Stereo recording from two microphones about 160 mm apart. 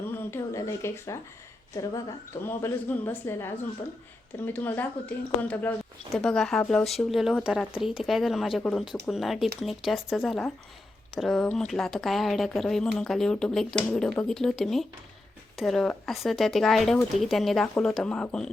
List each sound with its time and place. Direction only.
0.1 s a woman's voice: 15° left (ahead or behind)